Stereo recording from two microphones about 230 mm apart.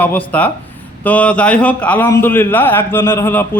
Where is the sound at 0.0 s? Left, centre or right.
Centre.